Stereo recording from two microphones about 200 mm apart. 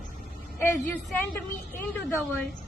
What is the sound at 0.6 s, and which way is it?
Speech, 10° left (ahead or behind).